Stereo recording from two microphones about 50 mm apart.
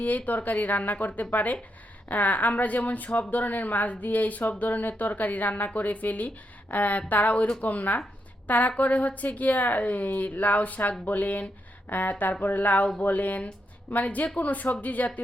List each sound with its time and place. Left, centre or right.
0.3 s speech: left